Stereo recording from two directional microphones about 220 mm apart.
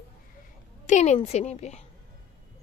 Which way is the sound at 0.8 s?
30° left (ahead or behind).